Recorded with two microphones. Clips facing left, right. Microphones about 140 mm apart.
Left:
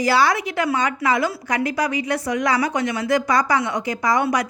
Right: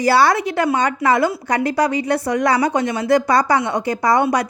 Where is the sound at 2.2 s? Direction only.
65° right (ahead or behind).